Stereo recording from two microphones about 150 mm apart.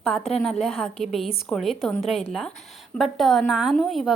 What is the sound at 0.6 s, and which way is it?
A woman's voice, centre (ahead or behind).